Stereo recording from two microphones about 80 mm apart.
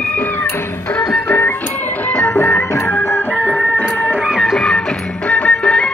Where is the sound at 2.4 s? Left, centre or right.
Left.